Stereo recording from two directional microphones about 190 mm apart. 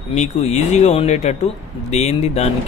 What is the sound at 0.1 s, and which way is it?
Speech, 35° left (ahead or behind).